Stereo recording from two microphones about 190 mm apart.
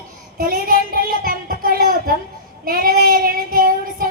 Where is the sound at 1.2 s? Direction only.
50° right (ahead or behind).